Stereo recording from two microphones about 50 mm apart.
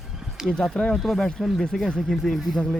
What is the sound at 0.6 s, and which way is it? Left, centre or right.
Speech, centre.